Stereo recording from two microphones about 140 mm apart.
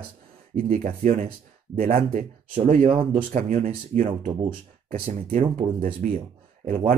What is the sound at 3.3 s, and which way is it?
Speech, 65° right (ahead or behind).